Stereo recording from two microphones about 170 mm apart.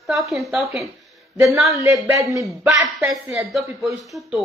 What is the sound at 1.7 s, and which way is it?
Speech, 15° right (ahead or behind).